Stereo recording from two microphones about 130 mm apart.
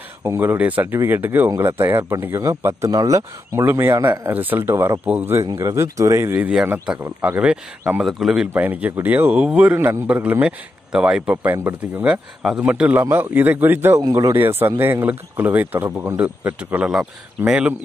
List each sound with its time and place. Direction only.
0.2 s a man's voice: 20° right (ahead or behind)
8.0 s speech: centre (ahead or behind); by 14.0 s 20° right (ahead or behind)
14.0 s a man's voice: 30° right (ahead or behind)
14.3 s speech: 20° right (ahead or behind)